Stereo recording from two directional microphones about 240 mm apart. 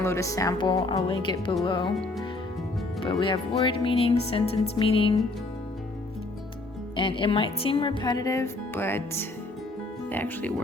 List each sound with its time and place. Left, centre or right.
0.0 s speech: centre
3.0 s speech: left
6.9 s speech: centre